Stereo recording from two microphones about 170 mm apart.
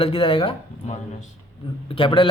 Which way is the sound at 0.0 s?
35° left (ahead or behind).